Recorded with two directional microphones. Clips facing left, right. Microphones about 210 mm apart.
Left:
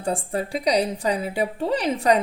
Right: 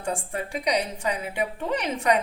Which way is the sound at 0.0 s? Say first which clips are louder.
Left 4 dB; 35° left (ahead or behind).